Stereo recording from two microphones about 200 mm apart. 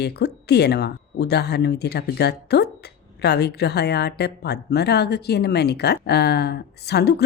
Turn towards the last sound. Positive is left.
turn(degrees=55)  # may be behind; listen again after turning